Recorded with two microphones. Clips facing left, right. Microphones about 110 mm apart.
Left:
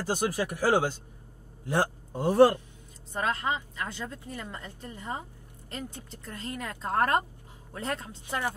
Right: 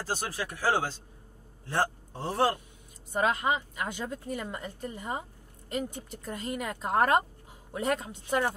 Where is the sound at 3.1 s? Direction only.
15° right (ahead or behind).